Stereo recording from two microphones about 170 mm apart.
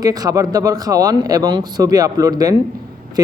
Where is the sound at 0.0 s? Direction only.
20° right (ahead or behind).